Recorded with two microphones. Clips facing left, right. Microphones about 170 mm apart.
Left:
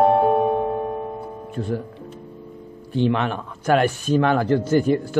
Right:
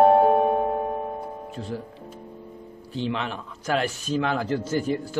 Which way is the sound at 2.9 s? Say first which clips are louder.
Left 8 dB; 55° left (ahead or behind).